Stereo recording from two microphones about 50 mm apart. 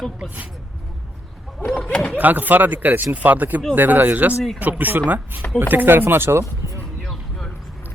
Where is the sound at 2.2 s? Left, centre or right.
Right.